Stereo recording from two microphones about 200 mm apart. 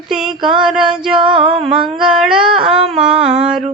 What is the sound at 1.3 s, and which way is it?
Music, 30° right (ahead or behind).